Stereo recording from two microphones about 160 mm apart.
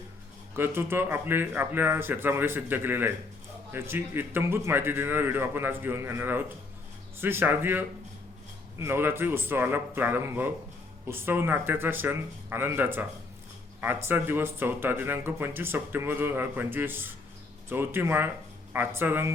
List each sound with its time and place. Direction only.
0.5 s speech: 15° right (ahead or behind)